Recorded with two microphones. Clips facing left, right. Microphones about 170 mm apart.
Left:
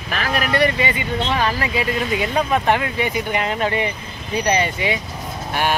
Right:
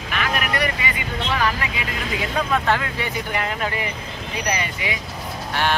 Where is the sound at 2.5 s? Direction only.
20° left (ahead or behind).